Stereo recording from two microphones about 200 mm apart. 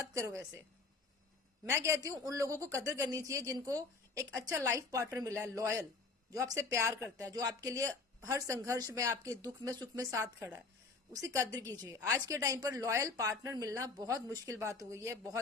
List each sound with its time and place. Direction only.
0.1 s speech: 15° right (ahead or behind)
1.6 s a woman's voice: 15° right (ahead or behind)